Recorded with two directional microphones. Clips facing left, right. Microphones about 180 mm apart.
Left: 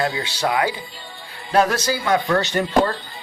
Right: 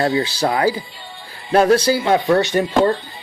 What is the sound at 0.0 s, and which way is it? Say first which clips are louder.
Speech: right 5 dB; 30° right (ahead or behind).